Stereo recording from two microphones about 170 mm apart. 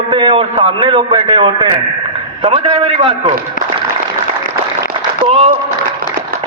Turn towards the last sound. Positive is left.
turn(degrees=-35)  # may be behind; listen again after turning